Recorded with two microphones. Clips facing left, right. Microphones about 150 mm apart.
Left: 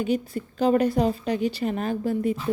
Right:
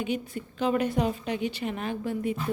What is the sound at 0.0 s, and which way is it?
A woman's voice, 40° left (ahead or behind).